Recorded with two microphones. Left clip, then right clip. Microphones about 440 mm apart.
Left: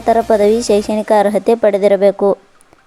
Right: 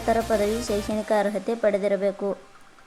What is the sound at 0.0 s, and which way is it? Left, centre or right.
A woman's voice, centre.